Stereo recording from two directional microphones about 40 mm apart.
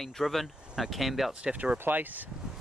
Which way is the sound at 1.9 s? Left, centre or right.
Right.